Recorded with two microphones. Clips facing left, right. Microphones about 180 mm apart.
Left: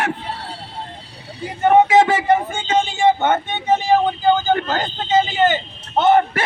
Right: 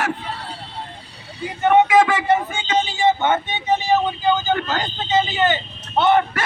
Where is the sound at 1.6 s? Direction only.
30° left (ahead or behind).